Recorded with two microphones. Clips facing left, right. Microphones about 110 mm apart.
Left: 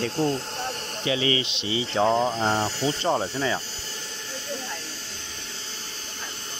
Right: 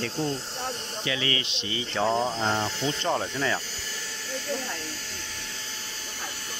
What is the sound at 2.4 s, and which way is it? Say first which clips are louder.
Speech: left 3 dB; 35° left (ahead or behind).